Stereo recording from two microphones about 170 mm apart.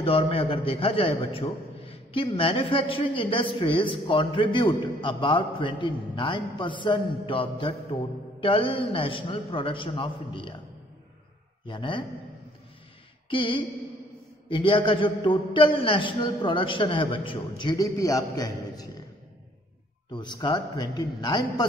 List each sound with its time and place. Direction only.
0.0 s a man's voice: 35° left (ahead or behind)
11.6 s a man's voice: 30° left (ahead or behind)
13.3 s a man's voice: 30° left (ahead or behind)
20.1 s a man's voice: 25° left (ahead or behind)